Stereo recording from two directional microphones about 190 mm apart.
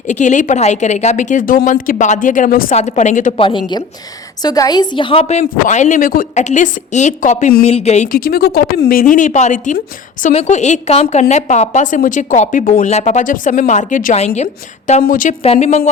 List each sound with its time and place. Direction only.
0.1 s a woman's voice: 40° left (ahead or behind)
3.3 s a woman's voice: 25° left (ahead or behind)
8.1 s a woman's voice: 50° left (ahead or behind); by 15.9 s 35° left (ahead or behind)